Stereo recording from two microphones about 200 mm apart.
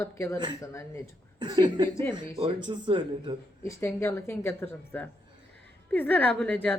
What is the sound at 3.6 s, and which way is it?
Speech, 15° left (ahead or behind).